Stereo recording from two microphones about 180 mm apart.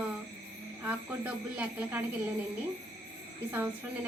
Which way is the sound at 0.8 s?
10° right (ahead or behind).